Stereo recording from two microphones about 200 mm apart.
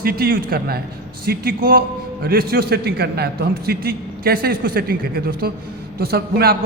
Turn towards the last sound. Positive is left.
turn(degrees=-50)  # may be behind; listen again after turning